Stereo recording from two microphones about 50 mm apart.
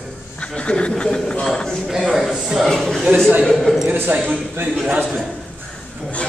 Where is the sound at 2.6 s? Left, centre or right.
Centre.